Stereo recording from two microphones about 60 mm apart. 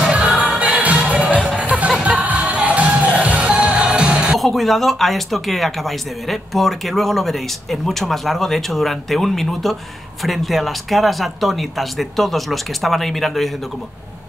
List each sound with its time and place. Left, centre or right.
0.0 s music: centre
4.4 s speech: centre